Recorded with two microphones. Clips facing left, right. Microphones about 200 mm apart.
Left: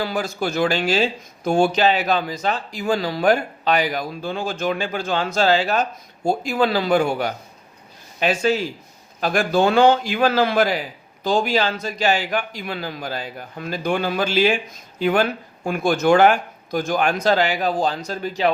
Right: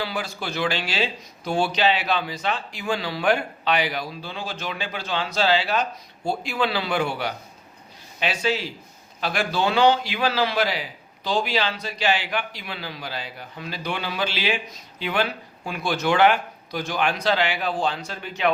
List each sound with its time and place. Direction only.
0.0 s a man's voice: 45° left (ahead or behind)